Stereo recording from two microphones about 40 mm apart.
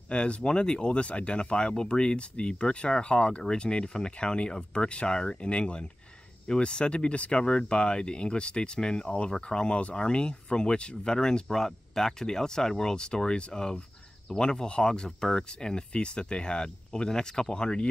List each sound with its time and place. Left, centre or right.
0.1 s speech: left